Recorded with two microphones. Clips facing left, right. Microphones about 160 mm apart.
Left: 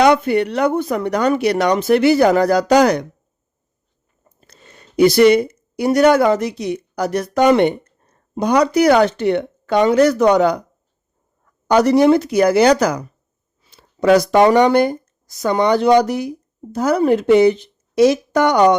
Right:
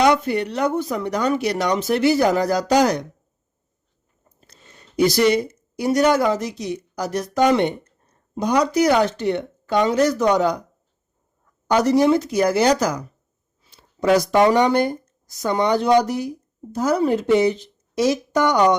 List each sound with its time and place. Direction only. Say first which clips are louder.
0.0 s speech: left 4 dB; 60° left (ahead or behind)
4.4 s speech: left 4 dB; 65° left (ahead or behind)
11.7 s speech: left 4 dB; 70° left (ahead or behind)